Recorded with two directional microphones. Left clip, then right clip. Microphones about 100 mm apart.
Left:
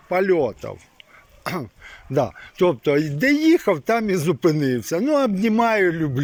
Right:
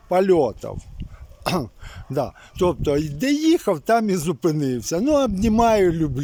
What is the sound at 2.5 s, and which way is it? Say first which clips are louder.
Speech: left 2 dB; 25° right (ahead or behind).